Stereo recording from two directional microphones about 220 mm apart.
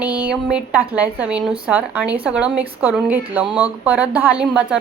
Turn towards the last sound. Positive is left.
turn(degrees=-5)  # may be behind; listen again after turning